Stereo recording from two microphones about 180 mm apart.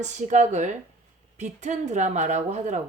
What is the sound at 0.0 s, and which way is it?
A woman's voice, 40° right (ahead or behind).